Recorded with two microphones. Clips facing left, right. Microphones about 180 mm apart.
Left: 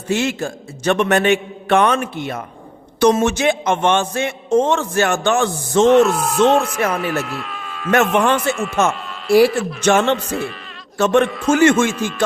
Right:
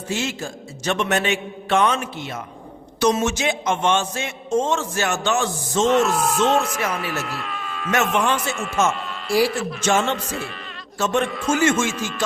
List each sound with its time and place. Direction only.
0.1 s speech: 60° left (ahead or behind)
5.9 s speech: centre (ahead or behind)
8.1 s speech: 60° left (ahead or behind)
8.4 s speech: centre (ahead or behind)
9.8 s speech: 60° left (ahead or behind)
10.2 s speech: centre (ahead or behind)
10.9 s speech: 60° left (ahead or behind)
11.3 s speech: centre (ahead or behind)